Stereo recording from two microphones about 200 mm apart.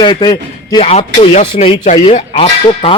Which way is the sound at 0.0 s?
20° left (ahead or behind).